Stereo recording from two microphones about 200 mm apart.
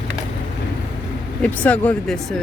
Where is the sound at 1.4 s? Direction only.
5° left (ahead or behind).